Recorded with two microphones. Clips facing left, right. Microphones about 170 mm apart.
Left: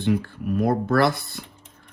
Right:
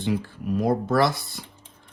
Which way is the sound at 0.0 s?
55° left (ahead or behind).